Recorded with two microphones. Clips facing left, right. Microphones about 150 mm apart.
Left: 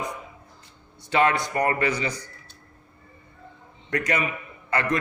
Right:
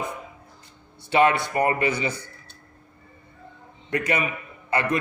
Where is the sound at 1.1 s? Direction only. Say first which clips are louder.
Right 2 dB; 20° right (ahead or behind).